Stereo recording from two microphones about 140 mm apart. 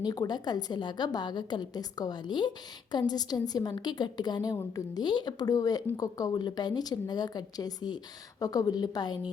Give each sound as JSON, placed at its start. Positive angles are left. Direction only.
{"t": 0.0, "sound": "a woman's voice", "side_deg": 30}